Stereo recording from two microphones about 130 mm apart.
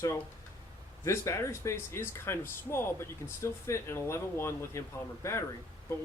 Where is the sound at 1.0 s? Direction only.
20° left (ahead or behind).